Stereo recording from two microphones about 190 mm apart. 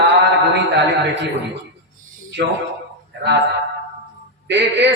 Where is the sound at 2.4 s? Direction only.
60° right (ahead or behind).